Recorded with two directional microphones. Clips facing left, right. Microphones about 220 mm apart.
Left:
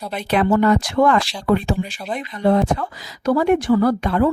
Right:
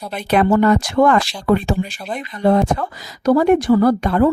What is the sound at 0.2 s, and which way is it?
Speech, 45° right (ahead or behind).